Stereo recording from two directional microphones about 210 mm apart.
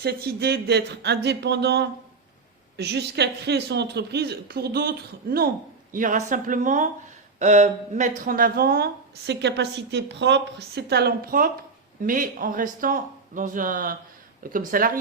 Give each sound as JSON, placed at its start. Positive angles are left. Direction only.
{"t": 0.0, "sound": "a woman's voice", "side_deg": -50}